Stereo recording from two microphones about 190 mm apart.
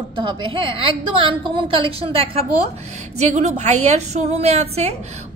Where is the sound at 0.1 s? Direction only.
25° right (ahead or behind).